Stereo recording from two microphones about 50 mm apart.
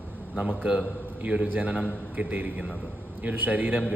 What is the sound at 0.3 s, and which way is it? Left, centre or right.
A man's voice, right.